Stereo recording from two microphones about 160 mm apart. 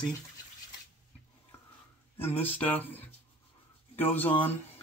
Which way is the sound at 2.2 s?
10° left (ahead or behind).